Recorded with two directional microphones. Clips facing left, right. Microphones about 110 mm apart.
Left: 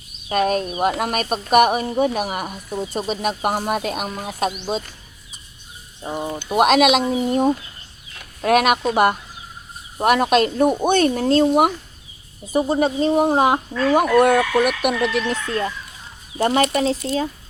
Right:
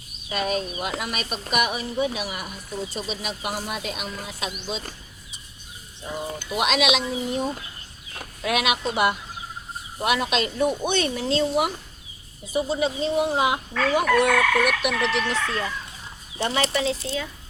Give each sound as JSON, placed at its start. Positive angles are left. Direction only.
{"t": 0.3, "sound": "speech", "side_deg": 45}
{"t": 6.0, "sound": "speech", "side_deg": 40}
{"t": 6.5, "sound": "speech", "side_deg": 50}